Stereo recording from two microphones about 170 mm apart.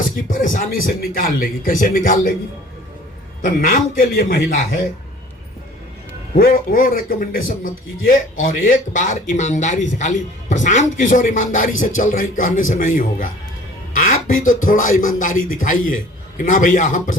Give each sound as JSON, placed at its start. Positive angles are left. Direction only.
{"t": 0.0, "sound": "a man's voice", "side_deg": 50}
{"t": 3.4, "sound": "a man's voice", "side_deg": 55}
{"t": 6.3, "sound": "a man's voice", "side_deg": 55}